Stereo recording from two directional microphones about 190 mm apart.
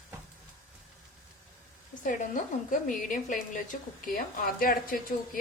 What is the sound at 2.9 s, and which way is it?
A woman's voice, 45° left (ahead or behind).